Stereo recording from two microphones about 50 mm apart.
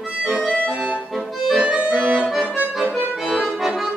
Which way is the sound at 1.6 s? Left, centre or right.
Centre.